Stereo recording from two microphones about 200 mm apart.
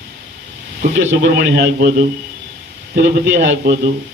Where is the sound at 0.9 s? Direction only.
70° right (ahead or behind).